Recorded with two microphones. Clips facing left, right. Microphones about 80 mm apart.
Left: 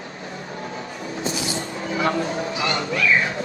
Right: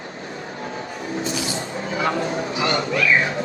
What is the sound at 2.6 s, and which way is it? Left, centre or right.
Music, right.